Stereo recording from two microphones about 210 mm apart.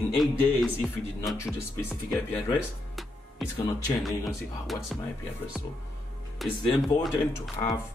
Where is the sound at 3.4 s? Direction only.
Centre (ahead or behind).